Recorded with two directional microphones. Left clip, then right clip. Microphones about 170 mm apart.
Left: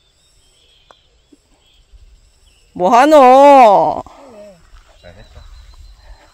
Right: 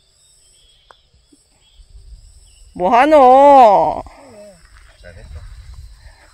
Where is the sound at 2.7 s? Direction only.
20° left (ahead or behind).